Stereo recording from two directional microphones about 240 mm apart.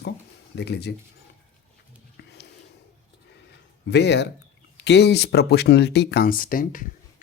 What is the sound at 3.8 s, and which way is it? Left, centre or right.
Speech, left.